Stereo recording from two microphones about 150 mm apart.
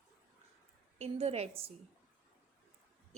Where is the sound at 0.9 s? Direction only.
45° right (ahead or behind).